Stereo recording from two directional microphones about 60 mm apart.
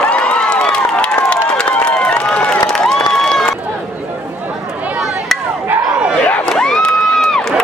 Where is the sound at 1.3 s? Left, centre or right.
Centre.